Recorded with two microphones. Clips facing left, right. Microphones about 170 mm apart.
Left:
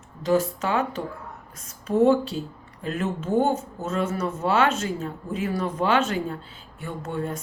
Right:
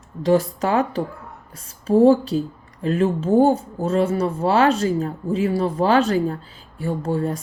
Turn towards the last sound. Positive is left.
turn(degrees=-35)  # may be behind; listen again after turning